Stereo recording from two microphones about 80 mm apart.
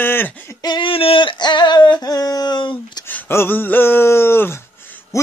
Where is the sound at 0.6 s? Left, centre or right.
Left.